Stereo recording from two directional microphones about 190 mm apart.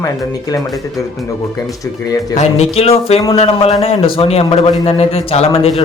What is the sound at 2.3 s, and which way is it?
A man's voice, 35° left (ahead or behind).